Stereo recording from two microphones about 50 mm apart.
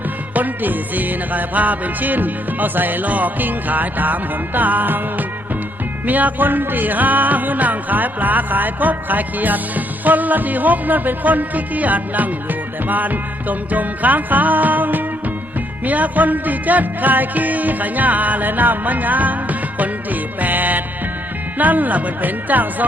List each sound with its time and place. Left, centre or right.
0.3 s music: right